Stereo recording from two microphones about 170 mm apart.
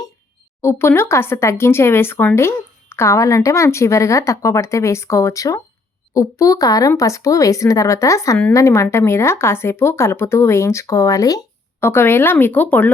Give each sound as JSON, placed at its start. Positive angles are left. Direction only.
{"t": 0.6, "sound": "speech", "side_deg": 15}